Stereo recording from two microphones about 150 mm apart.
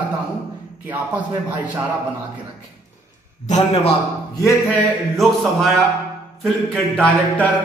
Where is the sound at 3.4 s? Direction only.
45° left (ahead or behind).